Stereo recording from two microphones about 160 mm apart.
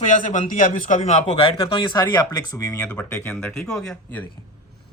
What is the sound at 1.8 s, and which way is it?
Speech, 30° left (ahead or behind).